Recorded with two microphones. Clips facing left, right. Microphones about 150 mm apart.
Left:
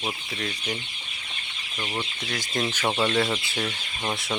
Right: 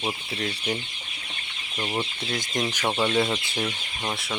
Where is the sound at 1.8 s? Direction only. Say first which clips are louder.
Right 3 dB; 20° right (ahead or behind).